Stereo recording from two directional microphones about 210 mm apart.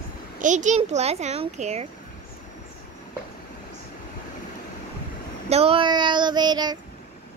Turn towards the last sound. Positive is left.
turn(degrees=-20)  # may be behind; listen again after turning